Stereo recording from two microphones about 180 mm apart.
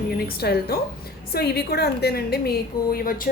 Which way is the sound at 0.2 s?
60° left (ahead or behind).